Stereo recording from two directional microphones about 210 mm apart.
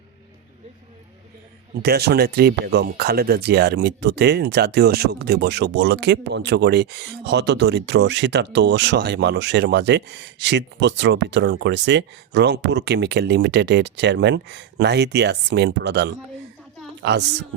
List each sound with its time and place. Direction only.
1.7 s a woman's voice: 50° right (ahead or behind)